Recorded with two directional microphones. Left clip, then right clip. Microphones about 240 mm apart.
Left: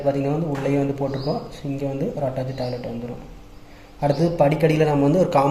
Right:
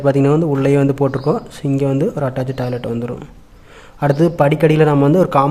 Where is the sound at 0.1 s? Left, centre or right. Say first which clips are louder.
Right 9 dB; right.